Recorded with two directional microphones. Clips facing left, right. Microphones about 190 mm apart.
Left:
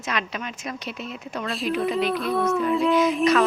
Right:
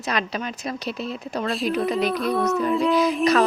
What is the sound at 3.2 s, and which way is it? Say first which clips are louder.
Speech: right 1 dB; 35° right (ahead or behind).